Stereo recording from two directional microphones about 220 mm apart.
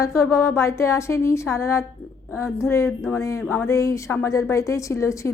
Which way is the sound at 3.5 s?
15° left (ahead or behind).